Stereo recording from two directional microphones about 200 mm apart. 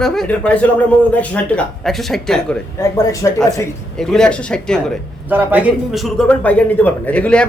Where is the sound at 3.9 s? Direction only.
5° left (ahead or behind).